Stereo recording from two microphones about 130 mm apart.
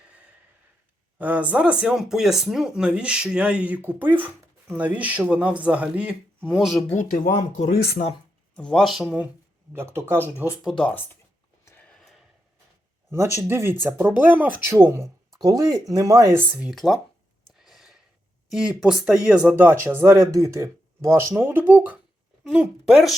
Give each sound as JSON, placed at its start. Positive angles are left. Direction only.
{"t": 1.2, "sound": "speech", "side_deg": -10}
{"t": 6.9, "sound": "speech", "side_deg": 70}
{"t": 8.5, "sound": "speech", "side_deg": 5}
{"t": 9.7, "sound": "speech", "side_deg": -20}
{"t": 10.6, "sound": "speech", "side_deg": 0}
{"t": 11.6, "sound": "a sound", "side_deg": 15}
{"t": 11.9, "sound": "a sound", "side_deg": 0}
{"t": 13.1, "sound": "speech", "side_deg": -20}
{"t": 16.7, "sound": "speech", "side_deg": 0}
{"t": 17.6, "sound": "a sound", "side_deg": 0}
{"t": 18.5, "sound": "speech", "side_deg": -5}